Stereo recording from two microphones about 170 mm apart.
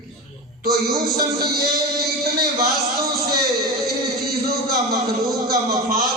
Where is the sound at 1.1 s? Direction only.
65° right (ahead or behind).